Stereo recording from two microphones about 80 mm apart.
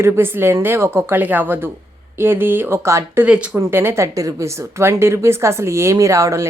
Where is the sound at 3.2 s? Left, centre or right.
Centre.